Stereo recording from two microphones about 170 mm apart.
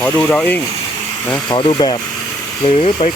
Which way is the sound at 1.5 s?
30° left (ahead or behind).